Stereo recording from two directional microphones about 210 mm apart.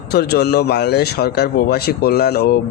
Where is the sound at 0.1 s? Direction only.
50° left (ahead or behind).